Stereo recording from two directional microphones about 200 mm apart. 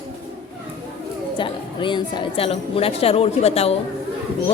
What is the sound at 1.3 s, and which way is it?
A woman's voice, 25° left (ahead or behind).